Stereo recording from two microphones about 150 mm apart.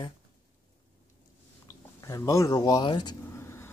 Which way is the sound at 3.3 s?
15° left (ahead or behind).